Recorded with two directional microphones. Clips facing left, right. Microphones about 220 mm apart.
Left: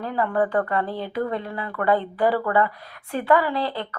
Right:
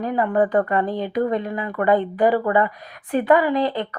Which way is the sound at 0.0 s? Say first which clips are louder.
Right 3 dB; 15° right (ahead or behind).